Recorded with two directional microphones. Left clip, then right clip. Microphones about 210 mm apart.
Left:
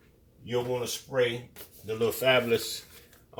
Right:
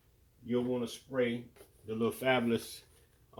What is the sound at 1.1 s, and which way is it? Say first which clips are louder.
Speech: left 6 dB; 20° right (ahead or behind).